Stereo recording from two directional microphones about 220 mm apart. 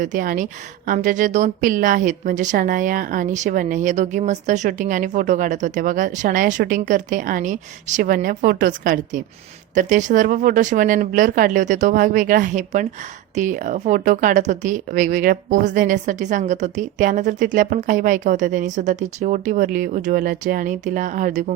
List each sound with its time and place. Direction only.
0.0 s a woman's voice: 35° right (ahead or behind)